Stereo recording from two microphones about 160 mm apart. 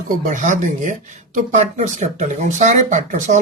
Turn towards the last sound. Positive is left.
turn(degrees=-50)  # may be behind; listen again after turning